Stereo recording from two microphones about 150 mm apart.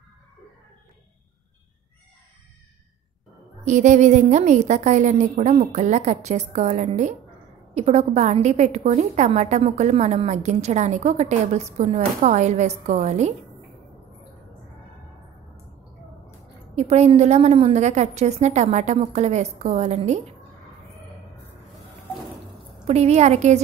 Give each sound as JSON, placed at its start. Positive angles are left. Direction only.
{"t": 3.6, "sound": "a woman's voice", "side_deg": -55}
{"t": 16.7, "sound": "a woman's voice", "side_deg": -45}
{"t": 22.8, "sound": "a woman's voice", "side_deg": -45}